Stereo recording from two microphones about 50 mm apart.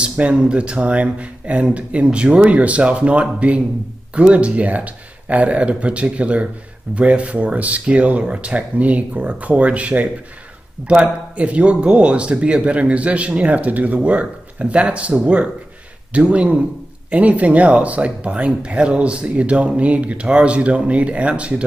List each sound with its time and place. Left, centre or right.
0.0 s speech: right
10.8 s speech: centre
11.3 s speech: right